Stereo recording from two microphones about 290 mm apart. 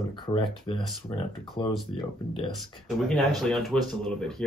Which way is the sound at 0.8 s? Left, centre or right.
Centre.